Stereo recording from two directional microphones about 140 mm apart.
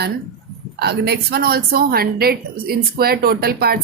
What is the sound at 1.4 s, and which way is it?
A woman's voice, 90° right.